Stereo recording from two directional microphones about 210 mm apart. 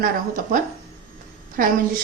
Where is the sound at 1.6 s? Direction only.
40° right (ahead or behind).